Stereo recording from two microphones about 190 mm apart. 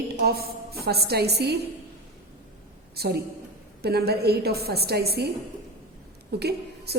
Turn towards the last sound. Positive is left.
turn(degrees=-60)  # may be behind; listen again after turning